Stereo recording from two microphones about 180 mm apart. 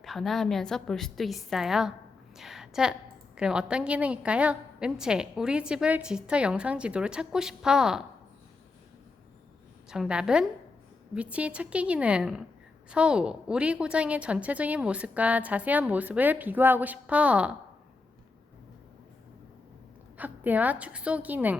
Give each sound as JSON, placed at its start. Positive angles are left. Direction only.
{"t": 0.0, "sound": "a woman's voice", "side_deg": 0}
{"t": 2.3, "sound": "a sound", "side_deg": 0}
{"t": 3.3, "sound": "a woman's voice", "side_deg": -5}
{"t": 9.9, "sound": "a woman's voice", "side_deg": -5}
{"t": 20.1, "sound": "a woman's voice", "side_deg": -10}